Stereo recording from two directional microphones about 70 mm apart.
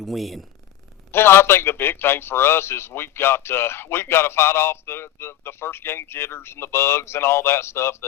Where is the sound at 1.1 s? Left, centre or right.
Left.